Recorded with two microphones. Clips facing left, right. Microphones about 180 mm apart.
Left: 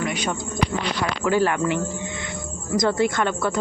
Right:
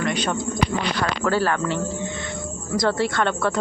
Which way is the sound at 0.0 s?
10° left (ahead or behind).